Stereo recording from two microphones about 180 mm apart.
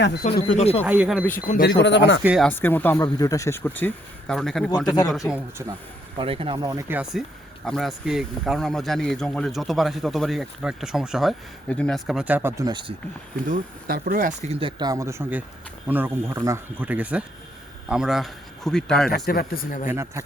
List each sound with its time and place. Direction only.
0.3 s speech: 35° left (ahead or behind)
0.9 s speech: 5° right (ahead or behind)
1.5 s a man's voice: 50° left (ahead or behind)
1.8 s speech: 80° left
2.4 s speech: 10° left (ahead or behind)
5.3 s speech: 15° right (ahead or behind)
6.1 s speech: 30° right (ahead or behind)
13.5 s speech: 50° right (ahead or behind); by 14.7 s 35° right (ahead or behind)
14.8 s speech: 20° right (ahead or behind); by 19.1 s 5° left (ahead or behind)
19.1 s a man's voice: 60° left (ahead or behind)
19.9 s speech: 15° right (ahead or behind)